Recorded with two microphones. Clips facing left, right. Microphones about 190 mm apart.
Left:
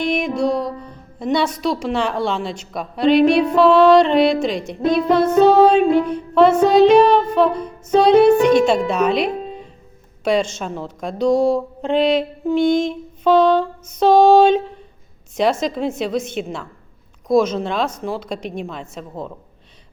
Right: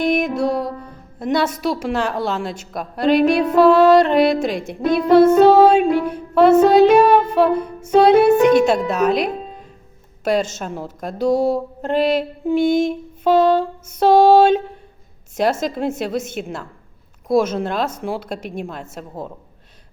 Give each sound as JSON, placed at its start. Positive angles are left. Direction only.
{"t": 0.2, "sound": "music", "side_deg": -5}
{"t": 0.8, "sound": "a woman's voice", "side_deg": -5}
{"t": 3.1, "sound": "a sound", "side_deg": -50}
{"t": 3.5, "sound": "a woman's voice", "side_deg": -5}
{"t": 4.8, "sound": "music", "side_deg": -55}
{"t": 5.1, "sound": "a woman's voice", "side_deg": -10}
{"t": 7.6, "sound": "music", "side_deg": -10}
{"t": 8.2, "sound": "a woman's voice", "side_deg": -5}
{"t": 15.6, "sound": "a woman's voice", "side_deg": -5}